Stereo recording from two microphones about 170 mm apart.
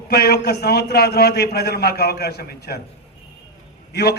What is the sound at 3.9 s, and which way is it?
Speech, 70° left (ahead or behind).